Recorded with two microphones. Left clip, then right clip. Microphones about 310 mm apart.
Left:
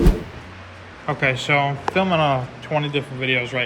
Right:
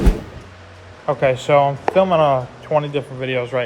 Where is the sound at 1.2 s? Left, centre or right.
Centre.